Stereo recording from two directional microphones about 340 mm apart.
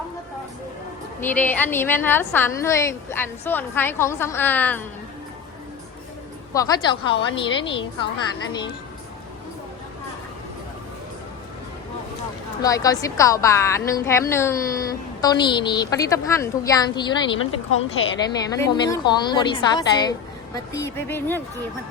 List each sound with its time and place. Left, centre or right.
1.2 s a woman's voice: centre
6.5 s a woman's voice: centre
12.6 s a woman's voice: centre
17.4 s speech: left
18.7 s a woman's voice: centre